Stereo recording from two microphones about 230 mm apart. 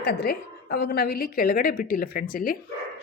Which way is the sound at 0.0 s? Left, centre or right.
Left.